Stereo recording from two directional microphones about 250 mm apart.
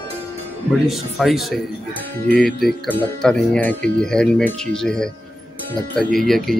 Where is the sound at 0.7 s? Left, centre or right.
Centre.